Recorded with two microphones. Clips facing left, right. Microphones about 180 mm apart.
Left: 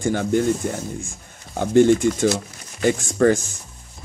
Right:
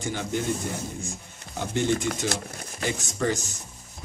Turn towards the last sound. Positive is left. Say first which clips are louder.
# left 10 dB
turn(degrees=55)  # may be behind; listen again after turning